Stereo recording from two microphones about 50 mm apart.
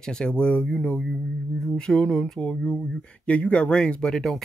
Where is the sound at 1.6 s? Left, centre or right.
Centre.